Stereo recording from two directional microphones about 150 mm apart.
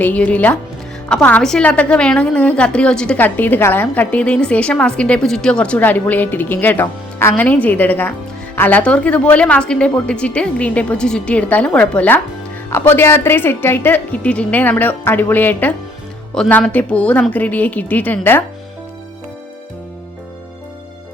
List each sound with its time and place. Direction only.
0.0 s a woman's voice: 10° left (ahead or behind)